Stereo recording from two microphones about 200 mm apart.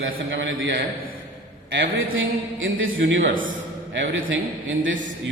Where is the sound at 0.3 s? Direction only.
70° right (ahead or behind).